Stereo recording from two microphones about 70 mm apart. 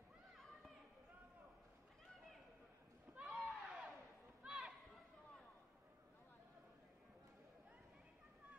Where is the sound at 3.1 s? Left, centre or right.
Centre.